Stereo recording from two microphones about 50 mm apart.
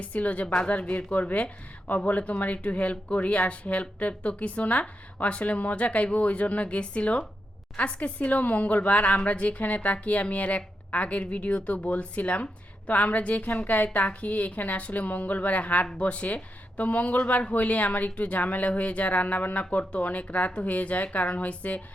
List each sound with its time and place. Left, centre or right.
0.0 s speech: left
0.4 s speech: centre
0.7 s a woman's voice: left